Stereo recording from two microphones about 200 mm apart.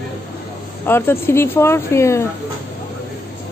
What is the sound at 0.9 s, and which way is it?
A woman's voice, 10° left (ahead or behind).